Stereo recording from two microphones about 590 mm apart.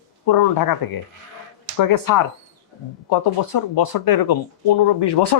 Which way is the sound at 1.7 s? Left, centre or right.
Left.